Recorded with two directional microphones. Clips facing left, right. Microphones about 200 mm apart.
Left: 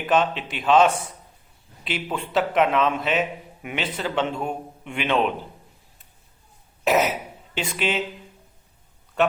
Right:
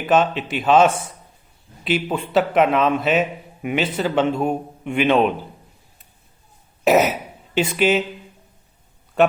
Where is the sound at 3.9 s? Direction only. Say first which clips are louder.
Right 5 dB; 40° right (ahead or behind).